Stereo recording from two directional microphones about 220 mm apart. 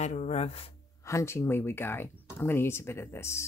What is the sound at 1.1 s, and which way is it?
Speech, 10° left (ahead or behind).